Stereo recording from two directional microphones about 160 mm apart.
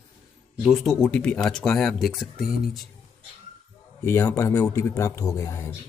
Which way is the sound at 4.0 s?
15° left (ahead or behind).